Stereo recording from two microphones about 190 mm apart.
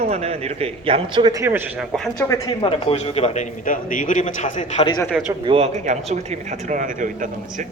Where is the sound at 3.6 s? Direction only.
45° left (ahead or behind).